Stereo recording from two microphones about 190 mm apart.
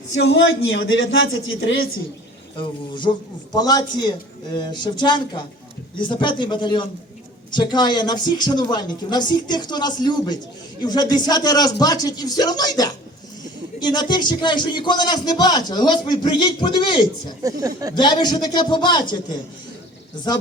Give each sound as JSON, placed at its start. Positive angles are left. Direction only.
{"t": 0.1, "sound": "a man's voice", "side_deg": 90}
{"t": 2.6, "sound": "a man's voice", "side_deg": 25}
{"t": 17.4, "sound": "speech", "side_deg": -20}
{"t": 17.9, "sound": "a man's voice", "side_deg": 25}